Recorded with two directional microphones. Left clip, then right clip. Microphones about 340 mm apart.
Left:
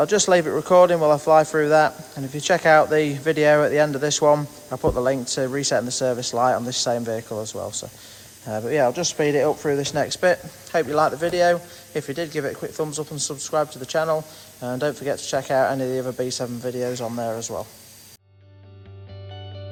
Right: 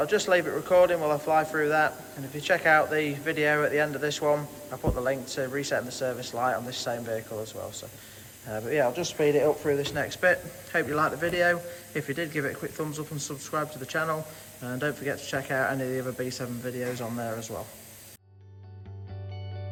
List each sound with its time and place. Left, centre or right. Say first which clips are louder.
0.0 s speech: left 6 dB; centre